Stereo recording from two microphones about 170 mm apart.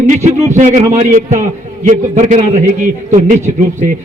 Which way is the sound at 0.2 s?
45° right (ahead or behind).